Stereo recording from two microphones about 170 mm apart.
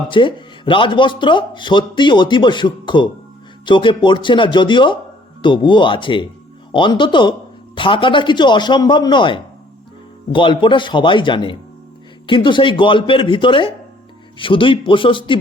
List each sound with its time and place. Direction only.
0.1 s a man's voice: 30° left (ahead or behind)